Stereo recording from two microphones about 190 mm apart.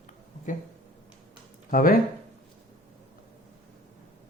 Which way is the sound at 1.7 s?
50° left (ahead or behind).